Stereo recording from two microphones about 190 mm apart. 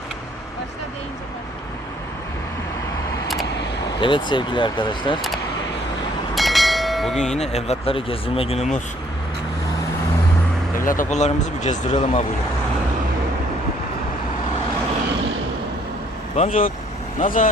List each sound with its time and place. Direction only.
4.0 s speech: 25° left (ahead or behind)
6.3 s train: centre (ahead or behind)
7.3 s speech: 35° left (ahead or behind)
10.8 s speech: 40° left (ahead or behind)
16.3 s speech: 35° left (ahead or behind)